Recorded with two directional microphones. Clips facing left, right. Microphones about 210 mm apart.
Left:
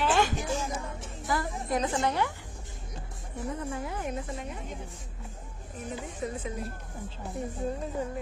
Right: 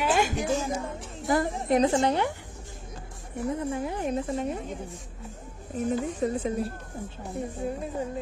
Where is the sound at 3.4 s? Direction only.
30° right (ahead or behind).